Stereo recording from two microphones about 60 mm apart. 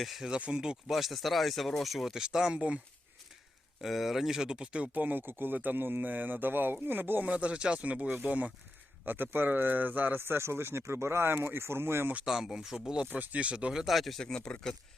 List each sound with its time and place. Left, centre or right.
0.0 s speech: centre
0.3 s speech: centre
3.8 s speech: centre
4.9 s speech: right
7.3 s speech: centre; by 12.1 s right
12.2 s speech: centre
13.1 s speech: right
13.8 s speech: centre